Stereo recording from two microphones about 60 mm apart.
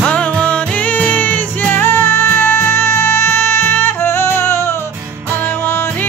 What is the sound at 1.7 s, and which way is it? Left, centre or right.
Music, left.